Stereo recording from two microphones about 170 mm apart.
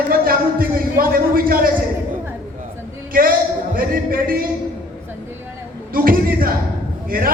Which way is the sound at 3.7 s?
55° right (ahead or behind).